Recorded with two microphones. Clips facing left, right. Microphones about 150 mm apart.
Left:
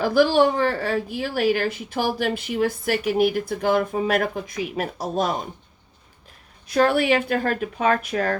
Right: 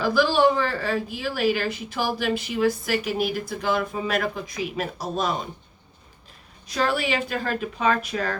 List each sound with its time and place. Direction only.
0.0 s a woman's voice: 55° left (ahead or behind)
6.7 s a woman's voice: 55° left (ahead or behind)